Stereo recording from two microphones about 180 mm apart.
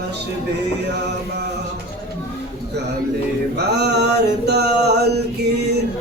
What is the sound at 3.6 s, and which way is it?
Mantra, 65° right (ahead or behind).